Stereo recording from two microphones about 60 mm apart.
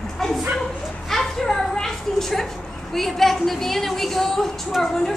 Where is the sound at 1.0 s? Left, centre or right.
Centre.